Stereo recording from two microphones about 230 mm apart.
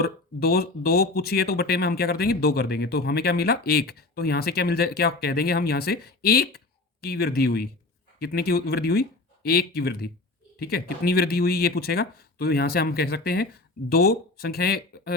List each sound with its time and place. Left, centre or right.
0.0 s speech: left